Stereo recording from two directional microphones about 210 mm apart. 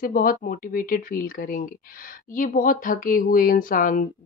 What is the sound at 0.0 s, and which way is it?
Speech, 45° left (ahead or behind).